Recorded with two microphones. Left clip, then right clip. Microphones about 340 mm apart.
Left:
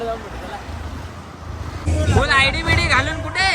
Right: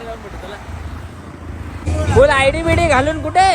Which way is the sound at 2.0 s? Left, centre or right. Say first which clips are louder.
Right 5 dB; centre.